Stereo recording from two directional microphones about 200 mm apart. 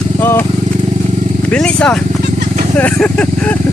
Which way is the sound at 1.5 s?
5° left (ahead or behind).